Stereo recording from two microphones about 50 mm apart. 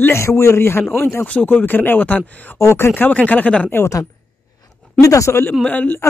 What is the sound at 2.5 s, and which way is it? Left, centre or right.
Speech, left.